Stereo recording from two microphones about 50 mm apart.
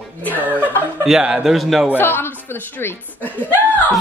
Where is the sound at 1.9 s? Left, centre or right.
Left.